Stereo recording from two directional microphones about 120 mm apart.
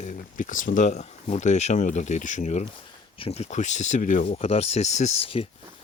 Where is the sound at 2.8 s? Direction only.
50° left (ahead or behind).